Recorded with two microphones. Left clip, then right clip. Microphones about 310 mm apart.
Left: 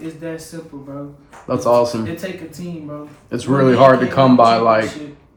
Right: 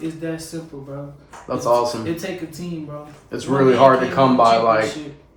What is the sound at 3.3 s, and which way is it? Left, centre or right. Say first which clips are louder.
Speech: left 1 dB; left.